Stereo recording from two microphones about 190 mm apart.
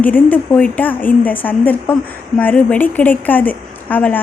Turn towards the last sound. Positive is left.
turn(degrees=10)  # may be behind; listen again after turning